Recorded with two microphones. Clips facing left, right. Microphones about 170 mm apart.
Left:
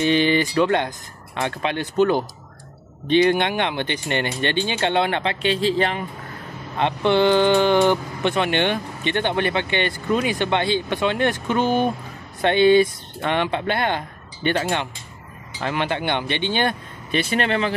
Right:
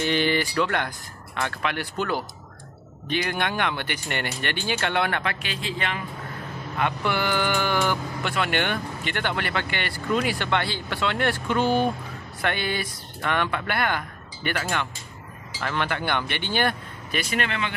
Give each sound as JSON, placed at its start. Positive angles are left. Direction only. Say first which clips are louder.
{"t": 0.0, "sound": "speech", "louder": "left 5 dB", "side_deg": 20}